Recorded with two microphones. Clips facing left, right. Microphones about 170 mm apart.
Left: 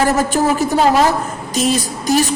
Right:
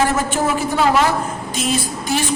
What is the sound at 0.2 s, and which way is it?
A woman's voice, 40° left (ahead or behind).